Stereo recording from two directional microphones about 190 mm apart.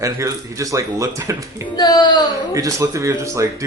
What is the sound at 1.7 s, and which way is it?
Speech, 20° left (ahead or behind).